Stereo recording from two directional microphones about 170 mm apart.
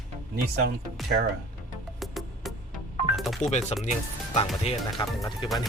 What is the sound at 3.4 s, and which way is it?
Speech, 40° left (ahead or behind).